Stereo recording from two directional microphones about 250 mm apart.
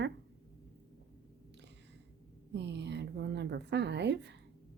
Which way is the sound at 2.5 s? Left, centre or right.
Right.